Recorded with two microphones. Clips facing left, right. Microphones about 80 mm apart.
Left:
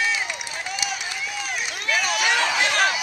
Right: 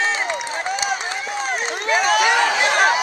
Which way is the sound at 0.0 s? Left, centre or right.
Right.